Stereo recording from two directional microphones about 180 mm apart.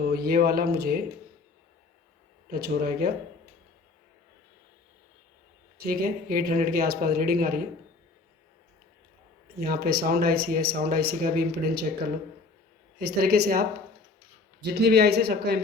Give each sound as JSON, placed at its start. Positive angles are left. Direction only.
{"t": 0.0, "sound": "speech", "side_deg": -60}
{"t": 2.5, "sound": "speech", "side_deg": -60}
{"t": 5.7, "sound": "speech", "side_deg": -55}
{"t": 9.6, "sound": "speech", "side_deg": -60}
{"t": 13.0, "sound": "speech", "side_deg": -60}